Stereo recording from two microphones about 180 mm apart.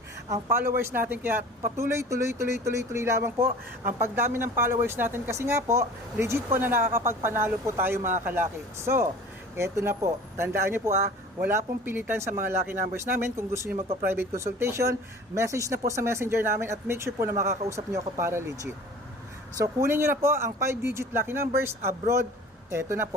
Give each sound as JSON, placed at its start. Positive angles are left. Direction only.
{"t": 0.3, "sound": "speech", "side_deg": -15}
{"t": 22.7, "sound": "speech", "side_deg": -15}